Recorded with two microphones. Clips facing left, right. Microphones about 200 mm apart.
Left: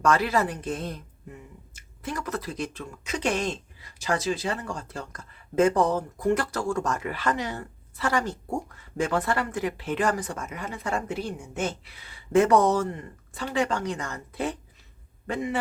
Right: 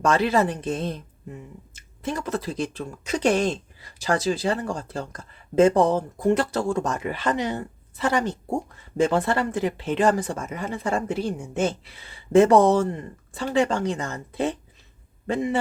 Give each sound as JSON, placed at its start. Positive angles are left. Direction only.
{"t": 0.0, "sound": "speech", "side_deg": -25}